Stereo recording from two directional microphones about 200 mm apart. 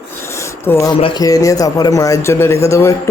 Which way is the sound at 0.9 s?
25° left (ahead or behind).